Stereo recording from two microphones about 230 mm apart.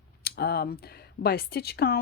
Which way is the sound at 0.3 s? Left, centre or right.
Left.